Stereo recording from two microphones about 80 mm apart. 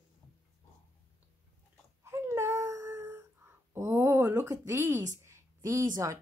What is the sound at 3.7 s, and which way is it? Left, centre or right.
A woman's voice, right.